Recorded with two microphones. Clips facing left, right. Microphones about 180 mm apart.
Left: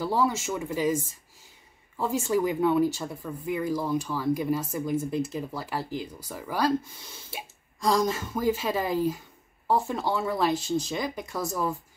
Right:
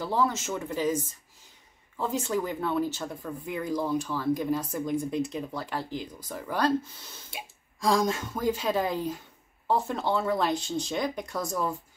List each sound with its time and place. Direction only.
0.0 s speech: 10° left (ahead or behind)